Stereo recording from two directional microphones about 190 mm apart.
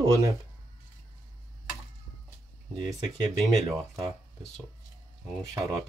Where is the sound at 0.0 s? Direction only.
20° right (ahead or behind).